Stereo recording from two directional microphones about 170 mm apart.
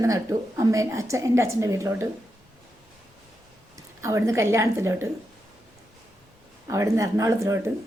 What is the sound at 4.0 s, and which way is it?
A woman's voice, 15° right (ahead or behind).